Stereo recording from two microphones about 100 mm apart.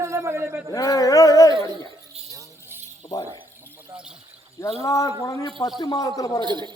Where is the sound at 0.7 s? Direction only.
35° left (ahead or behind).